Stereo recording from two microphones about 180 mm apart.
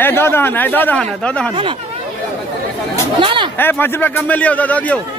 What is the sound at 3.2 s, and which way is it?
Speech, 30° right (ahead or behind).